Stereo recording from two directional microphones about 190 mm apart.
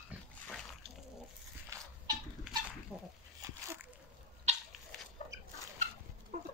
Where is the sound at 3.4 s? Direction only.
15° right (ahead or behind).